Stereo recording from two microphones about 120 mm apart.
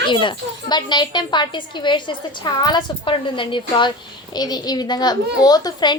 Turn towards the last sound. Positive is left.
turn(degrees=35)  # may be behind; listen again after turning